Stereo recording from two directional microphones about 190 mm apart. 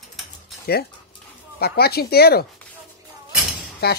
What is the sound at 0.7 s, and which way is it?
Speech, 55° left (ahead or behind).